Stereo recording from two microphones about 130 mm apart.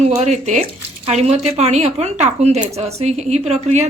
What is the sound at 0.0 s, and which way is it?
Speech, 60° right (ahead or behind).